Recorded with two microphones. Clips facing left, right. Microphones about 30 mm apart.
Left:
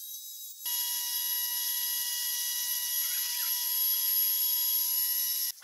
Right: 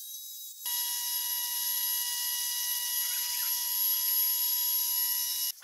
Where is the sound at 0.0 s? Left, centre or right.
Centre.